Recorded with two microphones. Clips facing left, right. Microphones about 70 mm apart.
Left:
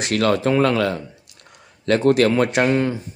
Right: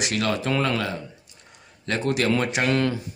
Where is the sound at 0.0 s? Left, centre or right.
Left.